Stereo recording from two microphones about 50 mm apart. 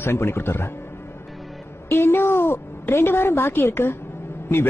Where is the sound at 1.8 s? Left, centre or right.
Left.